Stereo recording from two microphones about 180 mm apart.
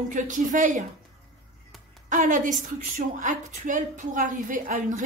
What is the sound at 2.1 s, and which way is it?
A woman's voice, 45° right (ahead or behind).